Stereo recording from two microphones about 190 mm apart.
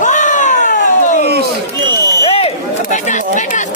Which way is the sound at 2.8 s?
40° left (ahead or behind).